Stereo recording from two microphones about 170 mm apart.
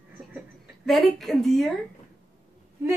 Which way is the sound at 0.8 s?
Centre (ahead or behind).